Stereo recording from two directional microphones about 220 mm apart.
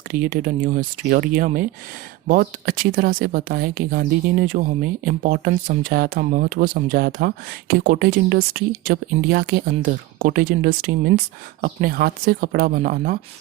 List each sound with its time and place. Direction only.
0.1 s speech: 40° right (ahead or behind)